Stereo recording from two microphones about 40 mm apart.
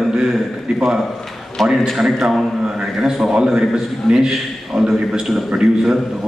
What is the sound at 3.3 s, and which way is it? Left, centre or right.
A man's voice, right.